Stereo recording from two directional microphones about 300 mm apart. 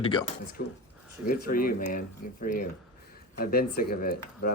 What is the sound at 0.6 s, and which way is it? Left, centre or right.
Speech, left.